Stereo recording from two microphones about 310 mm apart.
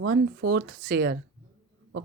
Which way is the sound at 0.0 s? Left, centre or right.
Right.